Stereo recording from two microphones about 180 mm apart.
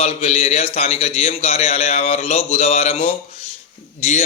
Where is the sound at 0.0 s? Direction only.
35° left (ahead or behind).